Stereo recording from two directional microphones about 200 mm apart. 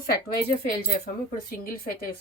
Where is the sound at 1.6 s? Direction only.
45° left (ahead or behind).